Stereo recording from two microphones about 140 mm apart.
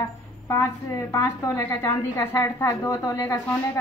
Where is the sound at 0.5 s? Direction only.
20° left (ahead or behind).